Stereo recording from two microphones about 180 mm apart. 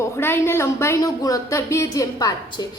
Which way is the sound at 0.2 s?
15° left (ahead or behind).